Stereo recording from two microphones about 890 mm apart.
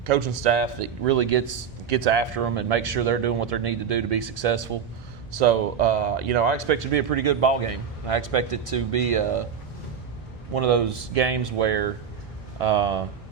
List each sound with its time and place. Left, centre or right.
0.0 s a man's voice: right
10.5 s a man's voice: right